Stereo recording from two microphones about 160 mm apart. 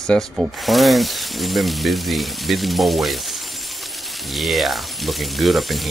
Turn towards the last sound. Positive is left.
turn(degrees=0)  # may be behind; listen again after turning